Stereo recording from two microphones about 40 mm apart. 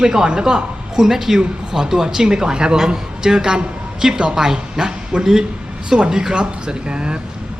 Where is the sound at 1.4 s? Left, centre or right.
Centre.